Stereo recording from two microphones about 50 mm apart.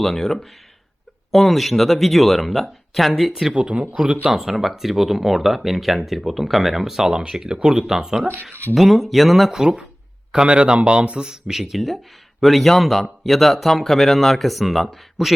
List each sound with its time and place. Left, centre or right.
0.0 s speech: centre
3.5 s speech: right
4.3 s speech: centre
9.6 s speech: centre